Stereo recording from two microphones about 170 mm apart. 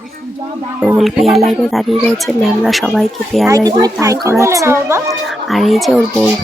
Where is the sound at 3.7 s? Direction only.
20° right (ahead or behind).